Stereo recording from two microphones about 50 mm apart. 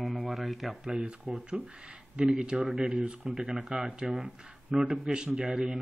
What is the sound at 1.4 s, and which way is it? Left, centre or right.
Speech, centre.